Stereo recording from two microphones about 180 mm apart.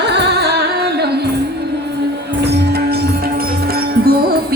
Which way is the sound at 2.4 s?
65° right (ahead or behind).